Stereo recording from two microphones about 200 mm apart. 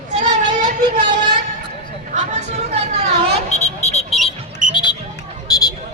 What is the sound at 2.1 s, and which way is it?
Chatter, 35° right (ahead or behind).